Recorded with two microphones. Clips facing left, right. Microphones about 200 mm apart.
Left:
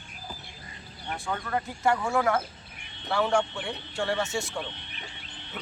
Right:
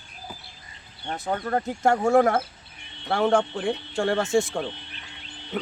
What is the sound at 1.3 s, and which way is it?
Speech, 40° right (ahead or behind).